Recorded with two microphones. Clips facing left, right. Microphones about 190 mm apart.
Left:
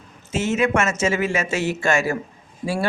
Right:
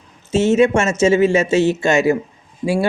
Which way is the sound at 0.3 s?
25° right (ahead or behind).